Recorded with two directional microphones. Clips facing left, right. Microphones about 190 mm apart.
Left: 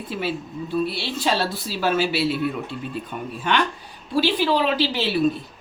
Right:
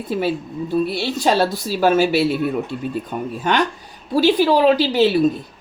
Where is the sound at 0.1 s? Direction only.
45° right (ahead or behind).